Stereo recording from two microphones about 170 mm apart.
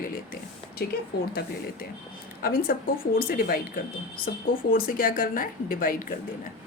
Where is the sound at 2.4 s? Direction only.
60° left (ahead or behind).